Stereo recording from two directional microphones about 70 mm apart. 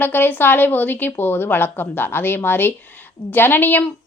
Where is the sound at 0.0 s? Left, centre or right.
Left.